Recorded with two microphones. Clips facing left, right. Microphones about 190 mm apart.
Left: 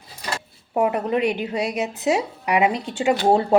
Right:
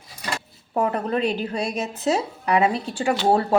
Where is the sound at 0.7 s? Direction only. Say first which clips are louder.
Left 2 dB; 15° left (ahead or behind).